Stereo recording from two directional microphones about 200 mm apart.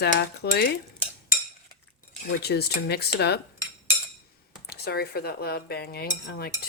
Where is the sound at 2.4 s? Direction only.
55° left (ahead or behind).